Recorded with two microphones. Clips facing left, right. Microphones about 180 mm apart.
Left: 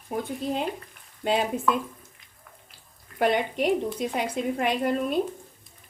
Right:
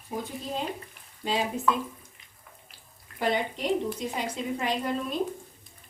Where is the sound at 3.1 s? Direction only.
60° left (ahead or behind).